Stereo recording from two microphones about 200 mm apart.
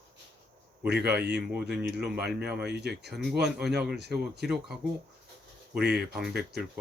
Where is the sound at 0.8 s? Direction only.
55° right (ahead or behind).